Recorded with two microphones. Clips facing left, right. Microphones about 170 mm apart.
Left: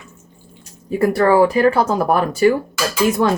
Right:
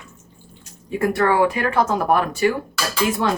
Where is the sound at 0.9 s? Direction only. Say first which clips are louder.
Left 4 dB; 35° left (ahead or behind).